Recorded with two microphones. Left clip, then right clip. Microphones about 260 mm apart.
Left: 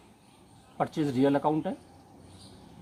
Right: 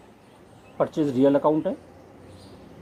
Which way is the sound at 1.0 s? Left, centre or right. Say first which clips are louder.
Right 6 dB; left.